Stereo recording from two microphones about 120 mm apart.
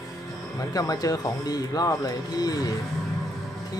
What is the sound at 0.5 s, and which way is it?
Speech, 30° left (ahead or behind).